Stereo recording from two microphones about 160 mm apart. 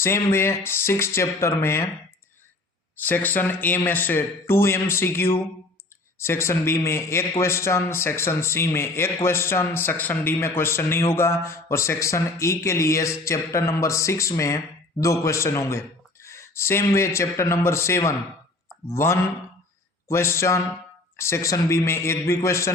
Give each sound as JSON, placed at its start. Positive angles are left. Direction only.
{"t": 0.0, "sound": "a man's voice", "side_deg": 15}
{"t": 3.0, "sound": "a man's voice", "side_deg": 10}